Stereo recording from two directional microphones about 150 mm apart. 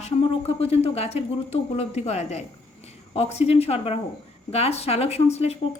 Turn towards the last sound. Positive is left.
turn(degrees=45)  # may be behind; listen again after turning